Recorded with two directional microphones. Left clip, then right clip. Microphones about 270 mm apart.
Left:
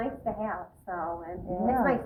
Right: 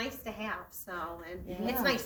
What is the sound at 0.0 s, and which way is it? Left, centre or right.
A woman's voice, right.